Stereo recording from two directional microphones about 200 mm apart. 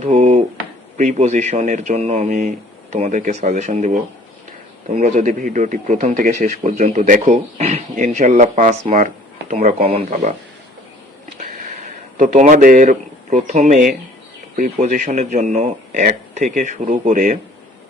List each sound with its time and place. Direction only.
0.0 s a sound: 35° right (ahead or behind)
0.9 s speech: 35° right (ahead or behind)
12.1 s speech: 40° right (ahead or behind)